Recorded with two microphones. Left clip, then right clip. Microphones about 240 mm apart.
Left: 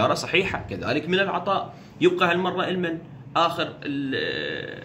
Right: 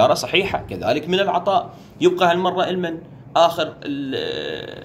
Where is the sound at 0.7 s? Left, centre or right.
Centre.